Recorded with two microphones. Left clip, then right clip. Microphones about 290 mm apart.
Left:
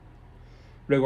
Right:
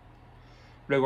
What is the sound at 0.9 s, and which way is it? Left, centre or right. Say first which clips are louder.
Speech: left 2 dB; centre.